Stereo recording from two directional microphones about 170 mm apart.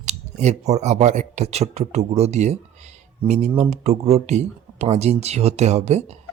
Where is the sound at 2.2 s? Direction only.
40° right (ahead or behind).